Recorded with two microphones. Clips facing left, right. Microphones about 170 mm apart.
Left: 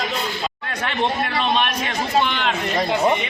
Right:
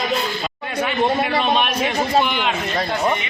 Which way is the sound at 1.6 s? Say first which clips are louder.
Right 3 dB; 10° right (ahead or behind).